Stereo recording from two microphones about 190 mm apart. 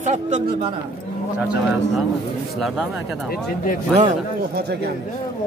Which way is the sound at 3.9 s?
40° right (ahead or behind).